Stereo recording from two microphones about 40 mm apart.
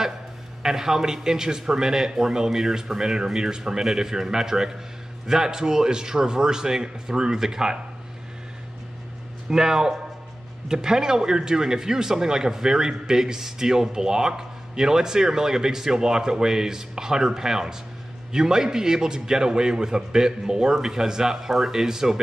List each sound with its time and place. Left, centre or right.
0.6 s speech: centre
9.5 s speech: centre